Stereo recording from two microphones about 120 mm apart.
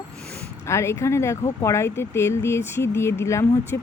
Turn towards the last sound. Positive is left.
turn(degrees=25)  # may be behind; listen again after turning